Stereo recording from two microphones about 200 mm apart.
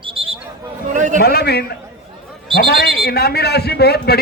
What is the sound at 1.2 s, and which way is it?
A man's voice, 50° left (ahead or behind).